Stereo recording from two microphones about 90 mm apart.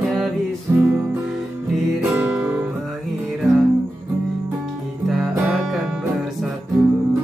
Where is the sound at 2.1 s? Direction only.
15° right (ahead or behind).